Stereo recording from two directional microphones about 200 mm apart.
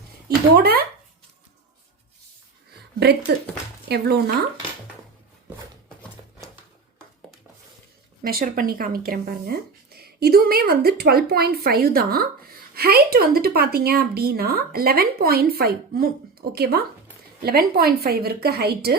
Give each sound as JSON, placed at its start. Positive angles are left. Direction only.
{"t": 0.5, "sound": "speech", "side_deg": -50}
{"t": 3.8, "sound": "speech", "side_deg": -55}
{"t": 8.3, "sound": "speech", "side_deg": -45}